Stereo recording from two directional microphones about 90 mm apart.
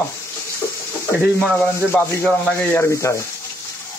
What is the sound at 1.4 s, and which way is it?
Sanding, 15° left (ahead or behind).